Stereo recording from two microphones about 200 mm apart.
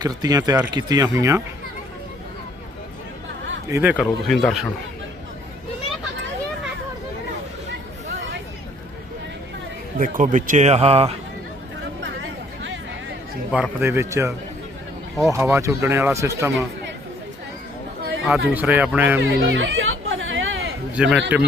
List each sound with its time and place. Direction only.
0.0 s speech: 20° right (ahead or behind)
3.7 s speech: 10° right (ahead or behind)
4.0 s speech: centre (ahead or behind)
10.0 s speech: 40° right (ahead or behind)
13.5 s speech: 10° right (ahead or behind)
18.3 s speech: 10° right (ahead or behind)
19.3 s chatter: 65° right (ahead or behind)
20.9 s a man's voice: 5° right (ahead or behind)